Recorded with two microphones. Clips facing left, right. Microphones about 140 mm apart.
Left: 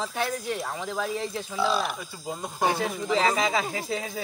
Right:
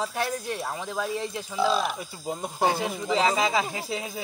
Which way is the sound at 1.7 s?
20° right (ahead or behind).